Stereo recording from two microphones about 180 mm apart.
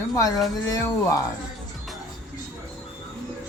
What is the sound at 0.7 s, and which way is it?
Speech, 20° left (ahead or behind).